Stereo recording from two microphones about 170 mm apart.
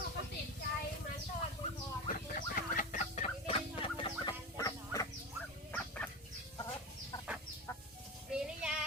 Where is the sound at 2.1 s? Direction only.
55° left (ahead or behind); by 5.1 s 20° left (ahead or behind).